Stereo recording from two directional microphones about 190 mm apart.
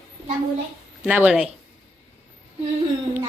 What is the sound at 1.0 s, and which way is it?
Speech, 5° right (ahead or behind).